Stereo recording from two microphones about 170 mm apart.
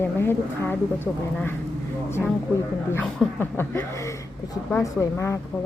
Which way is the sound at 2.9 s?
10° left (ahead or behind).